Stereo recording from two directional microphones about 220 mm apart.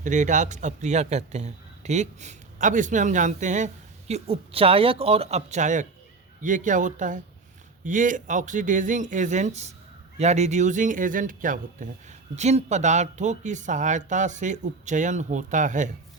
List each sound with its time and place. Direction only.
0.0 s speech: 35° right (ahead or behind)